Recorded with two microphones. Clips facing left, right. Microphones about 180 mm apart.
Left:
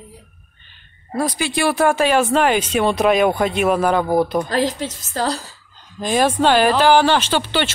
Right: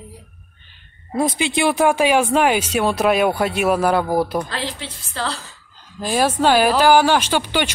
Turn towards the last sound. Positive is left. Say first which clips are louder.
# even
turn(degrees=-10)  # may be behind; listen again after turning